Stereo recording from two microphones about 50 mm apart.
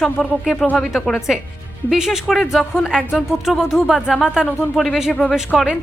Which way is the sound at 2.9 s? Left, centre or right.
Centre.